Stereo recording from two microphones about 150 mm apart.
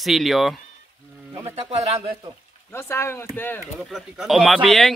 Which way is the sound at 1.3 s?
45° right (ahead or behind).